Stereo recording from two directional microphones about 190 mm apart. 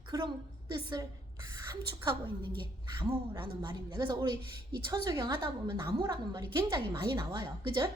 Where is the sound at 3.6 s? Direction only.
20° right (ahead or behind).